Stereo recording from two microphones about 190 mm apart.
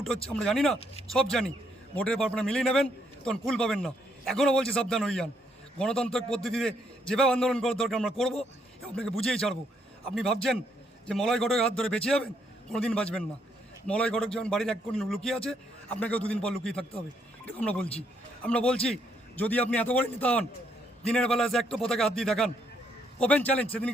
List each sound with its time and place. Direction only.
0.0 s a man's voice: 5° left (ahead or behind)